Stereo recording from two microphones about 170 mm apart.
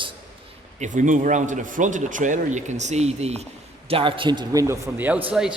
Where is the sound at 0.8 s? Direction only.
50° right (ahead or behind).